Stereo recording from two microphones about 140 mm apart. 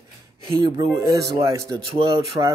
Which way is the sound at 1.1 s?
20° right (ahead or behind).